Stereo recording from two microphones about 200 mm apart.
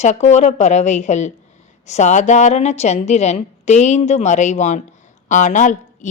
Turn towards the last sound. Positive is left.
turn(degrees=40)  # may be behind; listen again after turning